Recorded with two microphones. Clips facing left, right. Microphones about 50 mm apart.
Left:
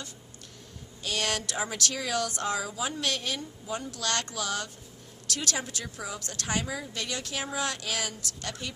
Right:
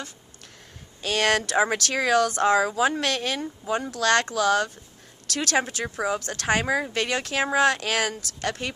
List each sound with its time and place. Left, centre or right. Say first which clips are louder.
1.0 s speech: right 8 dB; right
3.9 s speech: right 12 dB; right